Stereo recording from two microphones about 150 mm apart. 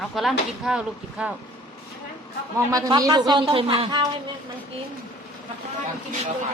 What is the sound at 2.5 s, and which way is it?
A man's voice, 25° right (ahead or behind).